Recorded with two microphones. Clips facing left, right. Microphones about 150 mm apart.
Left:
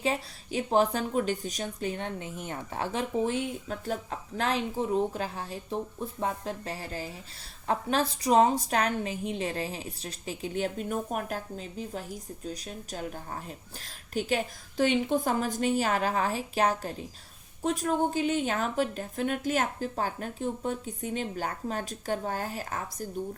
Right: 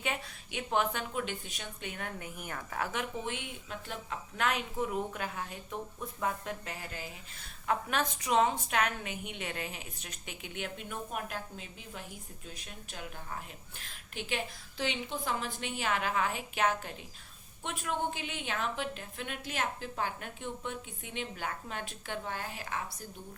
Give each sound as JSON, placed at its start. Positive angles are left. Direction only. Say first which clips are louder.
{"t": 0.0, "sound": "a woman's voice", "louder": "left 7 dB", "side_deg": 35}